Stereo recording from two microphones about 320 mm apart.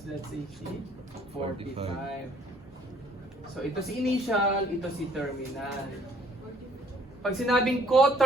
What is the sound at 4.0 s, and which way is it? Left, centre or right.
Speech, centre.